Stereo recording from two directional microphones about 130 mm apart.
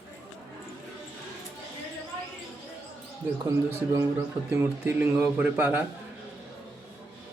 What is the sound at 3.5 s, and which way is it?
A man's voice, 25° right (ahead or behind).